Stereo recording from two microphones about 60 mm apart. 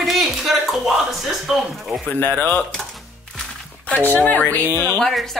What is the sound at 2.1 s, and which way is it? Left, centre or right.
Speech, left.